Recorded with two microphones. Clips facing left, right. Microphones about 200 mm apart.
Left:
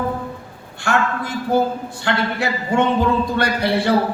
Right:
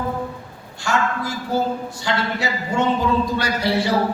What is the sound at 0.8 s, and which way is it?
A man's voice, 55° left (ahead or behind).